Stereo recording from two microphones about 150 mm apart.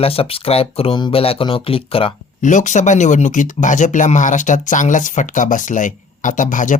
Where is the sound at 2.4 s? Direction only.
55° left (ahead or behind).